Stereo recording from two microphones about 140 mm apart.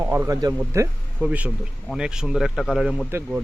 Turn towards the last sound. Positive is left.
turn(degrees=-15)  # may be behind; listen again after turning